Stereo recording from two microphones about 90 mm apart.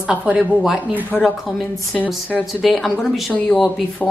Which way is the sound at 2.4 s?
Centre (ahead or behind).